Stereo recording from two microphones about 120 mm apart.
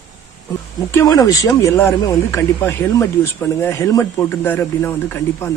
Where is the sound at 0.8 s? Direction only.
25° left (ahead or behind).